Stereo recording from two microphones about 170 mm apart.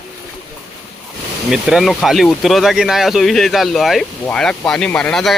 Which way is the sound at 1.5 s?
Centre (ahead or behind).